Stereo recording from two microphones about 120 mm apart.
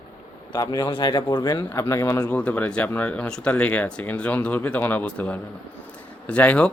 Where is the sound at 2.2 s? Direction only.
10° left (ahead or behind).